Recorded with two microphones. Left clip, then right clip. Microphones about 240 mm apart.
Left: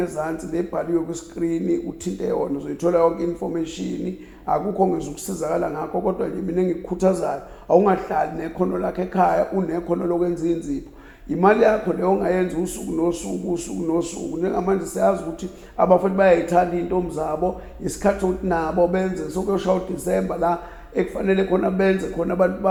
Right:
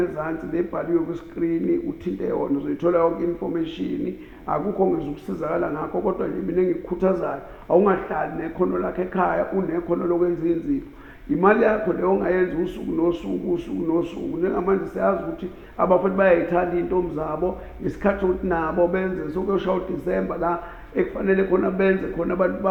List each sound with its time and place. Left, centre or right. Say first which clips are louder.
0.0 s speech: even; left